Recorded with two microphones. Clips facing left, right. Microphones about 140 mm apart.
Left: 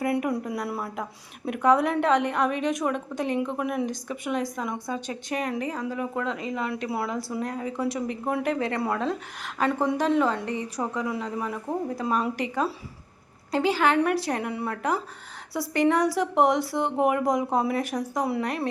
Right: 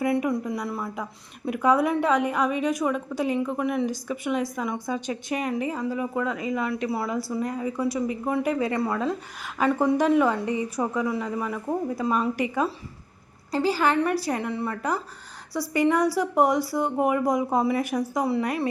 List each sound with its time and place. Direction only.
0.2 s a woman's voice: 10° left (ahead or behind); by 11.0 s 10° right (ahead or behind)
11.0 s a woman's voice: centre (ahead or behind)
13.5 s a woman's voice: centre (ahead or behind)